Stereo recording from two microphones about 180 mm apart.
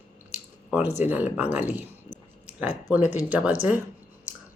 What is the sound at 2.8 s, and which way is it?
Speech, 10° right (ahead or behind).